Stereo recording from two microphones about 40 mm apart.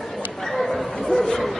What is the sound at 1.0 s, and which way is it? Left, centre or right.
Bow-wow, centre.